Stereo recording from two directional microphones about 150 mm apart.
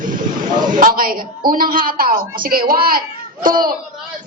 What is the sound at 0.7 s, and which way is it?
A woman's voice, 70° right (ahead or behind).